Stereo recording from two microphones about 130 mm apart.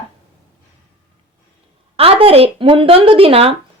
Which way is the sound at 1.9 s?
45° right (ahead or behind).